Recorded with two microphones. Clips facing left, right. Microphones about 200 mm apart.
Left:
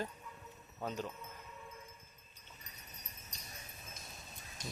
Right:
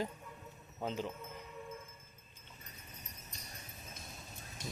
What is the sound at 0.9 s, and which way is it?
Speech, 20° right (ahead or behind).